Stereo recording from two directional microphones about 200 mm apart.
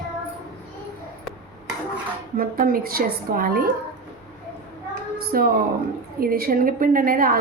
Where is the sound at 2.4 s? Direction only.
45° right (ahead or behind).